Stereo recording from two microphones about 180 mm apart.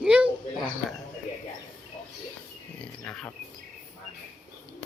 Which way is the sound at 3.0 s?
5° left (ahead or behind).